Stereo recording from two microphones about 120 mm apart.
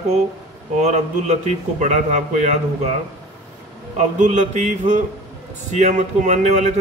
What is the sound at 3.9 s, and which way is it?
A man's voice, 90° right.